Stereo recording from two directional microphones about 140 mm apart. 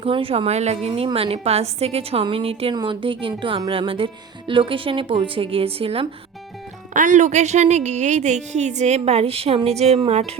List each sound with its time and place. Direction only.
0.0 s a woman's voice: 40° right (ahead or behind)
6.9 s a woman's voice: 65° right (ahead or behind); by 10.3 s 50° right (ahead or behind)